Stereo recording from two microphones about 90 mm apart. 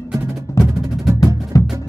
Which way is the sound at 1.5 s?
40° left (ahead or behind).